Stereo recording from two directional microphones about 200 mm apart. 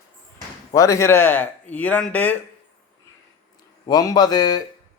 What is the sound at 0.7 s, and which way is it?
A man's voice, 15° left (ahead or behind).